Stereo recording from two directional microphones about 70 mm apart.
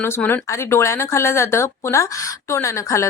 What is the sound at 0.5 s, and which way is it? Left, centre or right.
A woman's voice, left.